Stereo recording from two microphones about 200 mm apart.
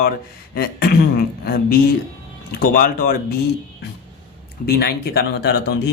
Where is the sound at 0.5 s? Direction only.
50° left (ahead or behind).